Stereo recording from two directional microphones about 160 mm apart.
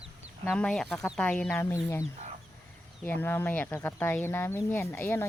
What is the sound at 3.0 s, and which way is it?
Speech, 10° left (ahead or behind).